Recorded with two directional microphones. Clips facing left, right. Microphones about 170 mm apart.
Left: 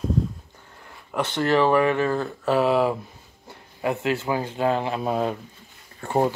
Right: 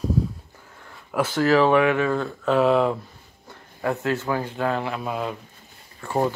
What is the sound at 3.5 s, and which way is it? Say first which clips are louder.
Speech: even; 20° left (ahead or behind).